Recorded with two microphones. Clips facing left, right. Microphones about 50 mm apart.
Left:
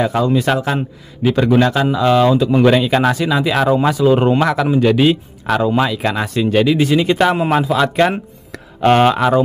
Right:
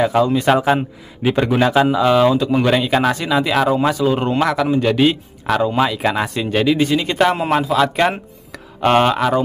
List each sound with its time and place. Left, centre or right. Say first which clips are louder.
0.0 s speech: even; centre
0.6 s speech: right 3 dB; centre